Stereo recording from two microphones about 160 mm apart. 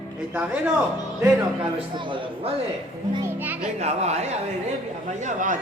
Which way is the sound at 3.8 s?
45° right (ahead or behind).